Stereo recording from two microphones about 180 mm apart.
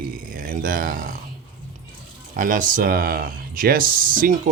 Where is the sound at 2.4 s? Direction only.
45° right (ahead or behind).